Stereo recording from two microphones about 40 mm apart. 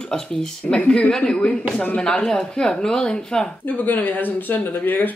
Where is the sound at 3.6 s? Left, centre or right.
Left.